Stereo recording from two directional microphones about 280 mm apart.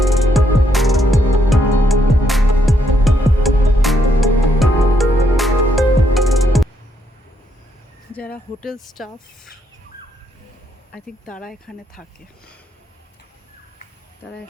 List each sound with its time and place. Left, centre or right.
0.1 s music: centre
8.6 s speech: centre
10.9 s speech: centre